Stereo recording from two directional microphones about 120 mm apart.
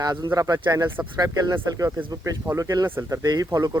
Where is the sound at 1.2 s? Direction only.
30° right (ahead or behind).